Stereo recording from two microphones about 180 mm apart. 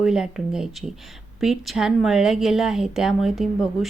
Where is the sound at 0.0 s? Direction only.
5° right (ahead or behind).